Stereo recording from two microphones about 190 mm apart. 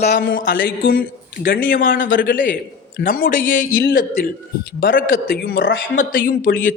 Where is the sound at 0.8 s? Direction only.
50° left (ahead or behind).